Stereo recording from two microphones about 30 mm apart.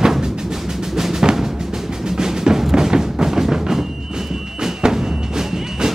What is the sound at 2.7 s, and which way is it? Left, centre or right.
Music, centre.